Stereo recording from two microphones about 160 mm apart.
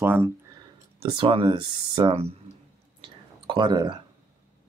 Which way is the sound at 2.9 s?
30° right (ahead or behind).